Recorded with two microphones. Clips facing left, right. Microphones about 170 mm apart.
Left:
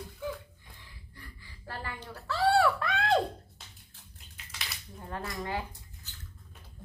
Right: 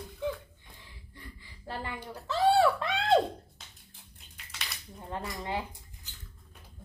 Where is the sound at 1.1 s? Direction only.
20° right (ahead or behind).